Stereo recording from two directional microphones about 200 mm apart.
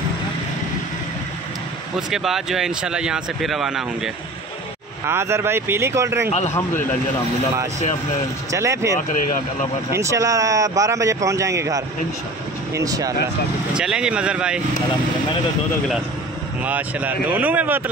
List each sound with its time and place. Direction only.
2.0 s speech: centre (ahead or behind)
5.0 s a man's voice: 15° right (ahead or behind)
8.5 s a man's voice: 15° right (ahead or behind)
9.9 s a man's voice: 15° right (ahead or behind)
13.7 s speech: 5° right (ahead or behind)
16.6 s a man's voice: 10° right (ahead or behind)